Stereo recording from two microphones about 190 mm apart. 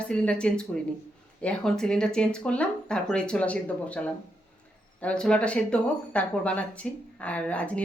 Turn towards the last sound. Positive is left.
turn(degrees=5)  # may be behind; listen again after turning